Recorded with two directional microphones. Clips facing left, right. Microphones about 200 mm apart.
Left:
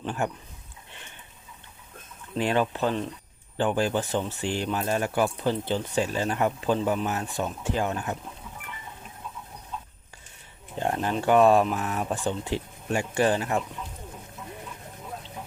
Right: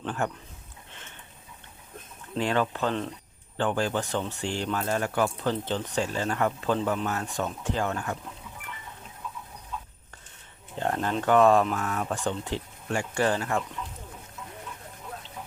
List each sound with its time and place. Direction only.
0.0 s speech: 15° left (ahead or behind)
2.4 s speech: 15° left (ahead or behind)
10.8 s speech: 15° left (ahead or behind)